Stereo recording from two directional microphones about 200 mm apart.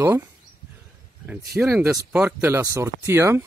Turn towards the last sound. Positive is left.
turn(degrees=-10)  # may be behind; listen again after turning